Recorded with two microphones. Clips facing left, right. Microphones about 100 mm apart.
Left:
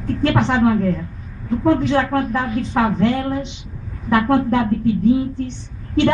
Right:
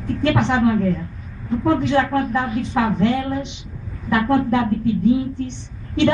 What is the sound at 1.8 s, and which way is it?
A woman's voice, 40° left (ahead or behind).